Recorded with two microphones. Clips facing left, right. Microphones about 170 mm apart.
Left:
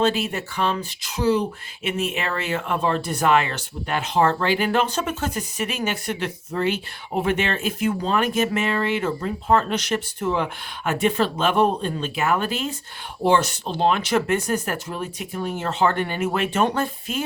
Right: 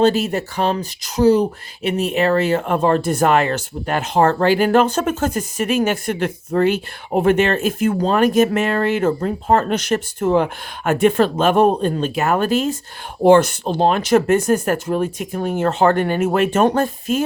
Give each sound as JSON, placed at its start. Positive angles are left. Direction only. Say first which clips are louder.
{"t": 0.0, "sound": "speech", "louder": "right 6 dB", "side_deg": -40}